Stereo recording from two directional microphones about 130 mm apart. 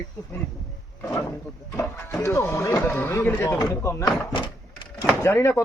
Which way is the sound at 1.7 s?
20° left (ahead or behind).